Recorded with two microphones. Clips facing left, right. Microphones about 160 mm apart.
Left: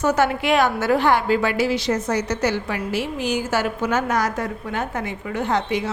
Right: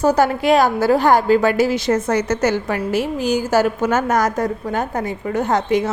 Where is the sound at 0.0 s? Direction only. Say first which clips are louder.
Right 4 dB; 35° right (ahead or behind).